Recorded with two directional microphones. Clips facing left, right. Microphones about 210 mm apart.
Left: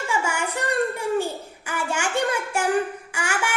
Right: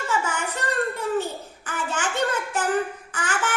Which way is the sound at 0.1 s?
10° left (ahead or behind).